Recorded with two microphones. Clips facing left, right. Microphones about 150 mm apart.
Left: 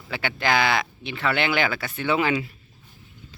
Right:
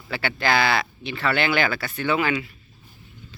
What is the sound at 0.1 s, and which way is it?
Speech, 15° left (ahead or behind).